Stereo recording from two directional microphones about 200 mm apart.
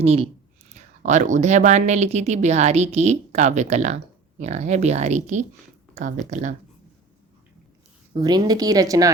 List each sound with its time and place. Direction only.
0.0 s speech: 30° right (ahead or behind)
8.1 s a woman's voice: 20° right (ahead or behind)